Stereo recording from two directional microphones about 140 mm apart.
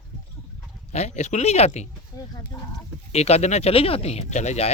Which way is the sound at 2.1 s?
25° left (ahead or behind).